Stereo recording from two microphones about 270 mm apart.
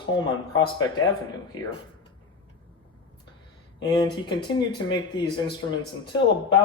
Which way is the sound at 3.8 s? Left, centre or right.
Centre.